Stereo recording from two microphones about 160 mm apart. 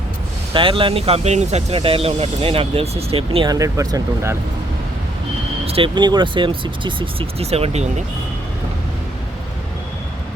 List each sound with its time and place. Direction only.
0.5 s speech: 30° right (ahead or behind)
3.5 s speech: 20° right (ahead or behind)
5.6 s speech: 35° right (ahead or behind)